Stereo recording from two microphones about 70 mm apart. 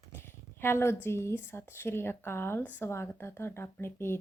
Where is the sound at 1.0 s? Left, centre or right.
Left.